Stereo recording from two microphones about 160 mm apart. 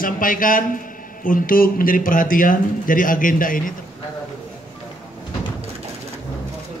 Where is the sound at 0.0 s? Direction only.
60° left (ahead or behind).